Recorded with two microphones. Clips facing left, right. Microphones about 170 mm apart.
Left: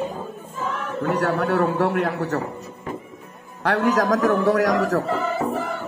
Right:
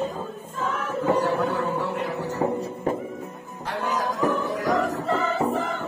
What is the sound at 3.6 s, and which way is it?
A man's voice, 75° left (ahead or behind).